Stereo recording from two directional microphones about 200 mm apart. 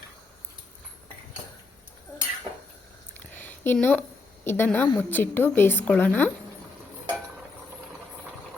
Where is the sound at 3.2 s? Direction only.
10° left (ahead or behind).